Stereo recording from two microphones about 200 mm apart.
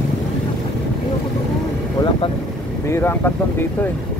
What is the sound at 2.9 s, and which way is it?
Speech, 10° left (ahead or behind).